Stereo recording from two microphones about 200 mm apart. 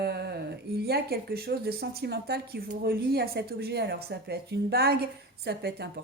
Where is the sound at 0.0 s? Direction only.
55° right (ahead or behind).